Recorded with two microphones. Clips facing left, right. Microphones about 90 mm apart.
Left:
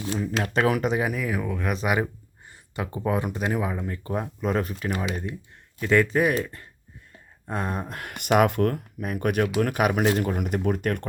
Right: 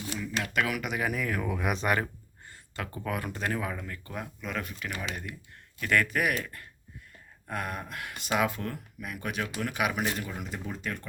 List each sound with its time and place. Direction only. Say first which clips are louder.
0.4 s speech: left 9 dB; 35° left (ahead or behind)
1.1 s speech: left 3 dB; 5° left (ahead or behind)
1.8 s speech: left 3 dB; 10° left (ahead or behind); by 5.0 s 35° left (ahead or behind)
5.8 s speech: left 6 dB; 20° left (ahead or behind); by 8.1 s 40° left (ahead or behind)
8.1 s speech: left 8 dB; 60° left (ahead or behind)
10.2 s speech: left 11 dB; 60° left (ahead or behind)